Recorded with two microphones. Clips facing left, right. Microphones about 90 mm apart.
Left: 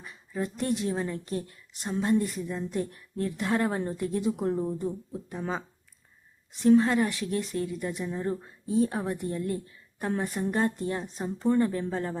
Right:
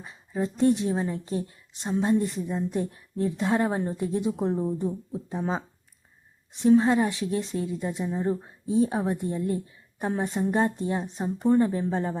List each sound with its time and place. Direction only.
0.0 s a woman's voice: 20° right (ahead or behind)